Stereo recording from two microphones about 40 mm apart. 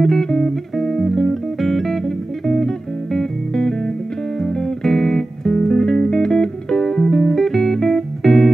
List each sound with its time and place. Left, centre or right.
0.0 s music: centre